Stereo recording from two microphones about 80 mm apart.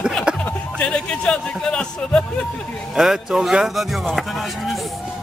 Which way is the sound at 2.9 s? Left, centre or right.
Centre.